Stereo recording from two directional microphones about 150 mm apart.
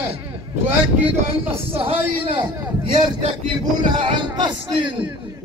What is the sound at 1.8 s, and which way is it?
Speech, 40° right (ahead or behind).